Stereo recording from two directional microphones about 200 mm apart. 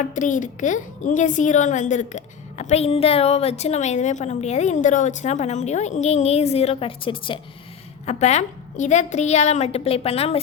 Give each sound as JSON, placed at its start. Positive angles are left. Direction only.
{"t": 0.1, "sound": "a child's voice", "side_deg": 40}